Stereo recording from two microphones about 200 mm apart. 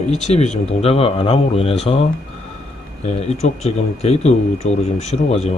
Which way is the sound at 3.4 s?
30° left (ahead or behind).